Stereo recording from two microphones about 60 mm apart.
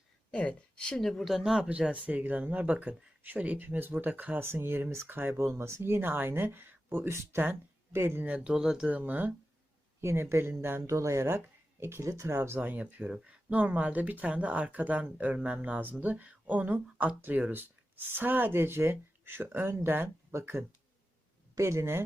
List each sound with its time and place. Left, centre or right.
0.3 s speech: centre
1.2 s speech: centre
1.7 s speech: right
4.4 s speech: right
5.3 s speech: right
8.3 s speech: centre
8.9 s speech: right
10.0 s speech: right
10.8 s speech: right
12.0 s speech: right
12.5 s speech: right